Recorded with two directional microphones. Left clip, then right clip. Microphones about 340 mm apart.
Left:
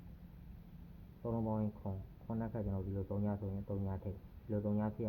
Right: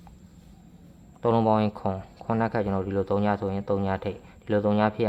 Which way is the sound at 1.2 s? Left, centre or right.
Right.